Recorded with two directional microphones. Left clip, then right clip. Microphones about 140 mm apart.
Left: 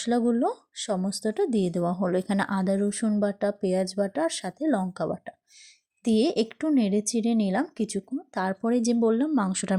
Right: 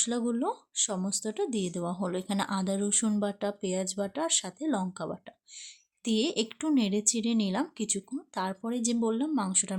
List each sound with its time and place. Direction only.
0.0 s speech: 30° left (ahead or behind)